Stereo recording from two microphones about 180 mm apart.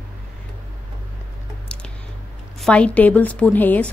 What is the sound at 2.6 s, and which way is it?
A woman's voice, 5° left (ahead or behind).